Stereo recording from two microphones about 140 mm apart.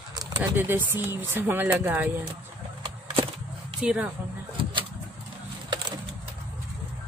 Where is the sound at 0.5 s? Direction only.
15° right (ahead or behind).